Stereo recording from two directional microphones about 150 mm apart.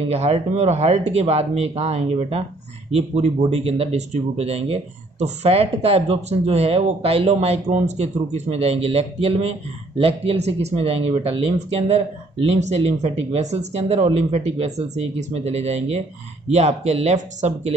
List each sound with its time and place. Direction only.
0.1 s speech: 45° right (ahead or behind)